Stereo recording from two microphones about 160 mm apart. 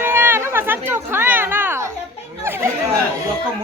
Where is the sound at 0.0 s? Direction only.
15° right (ahead or behind).